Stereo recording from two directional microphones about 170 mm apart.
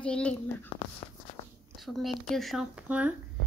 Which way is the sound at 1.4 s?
35° left (ahead or behind).